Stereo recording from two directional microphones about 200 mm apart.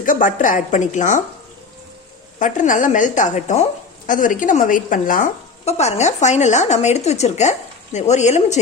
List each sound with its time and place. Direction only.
0.0 s a woman's voice: 40° left (ahead or behind)
2.4 s a woman's voice: 40° left (ahead or behind)